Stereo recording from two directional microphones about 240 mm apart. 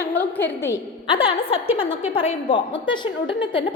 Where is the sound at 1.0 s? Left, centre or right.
Left.